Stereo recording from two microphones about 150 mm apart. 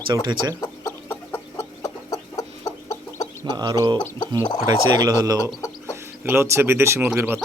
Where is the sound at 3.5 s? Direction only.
25° right (ahead or behind).